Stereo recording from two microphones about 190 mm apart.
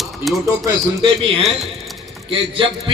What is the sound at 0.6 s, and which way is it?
Speech, 25° right (ahead or behind).